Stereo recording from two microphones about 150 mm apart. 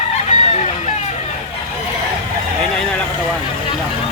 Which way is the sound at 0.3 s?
50° left (ahead or behind).